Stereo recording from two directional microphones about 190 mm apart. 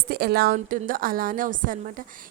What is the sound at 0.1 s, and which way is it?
A woman's voice, 55° right (ahead or behind).